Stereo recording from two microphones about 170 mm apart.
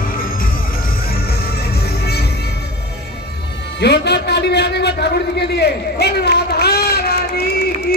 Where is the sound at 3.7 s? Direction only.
80° left.